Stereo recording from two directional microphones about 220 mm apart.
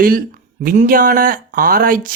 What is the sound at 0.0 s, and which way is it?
Speech, 40° right (ahead or behind).